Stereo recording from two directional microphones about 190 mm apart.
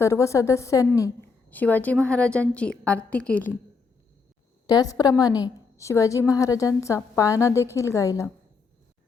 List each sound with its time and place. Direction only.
0.0 s a woman's voice: 15° left (ahead or behind)
4.6 s a woman's voice: 20° left (ahead or behind)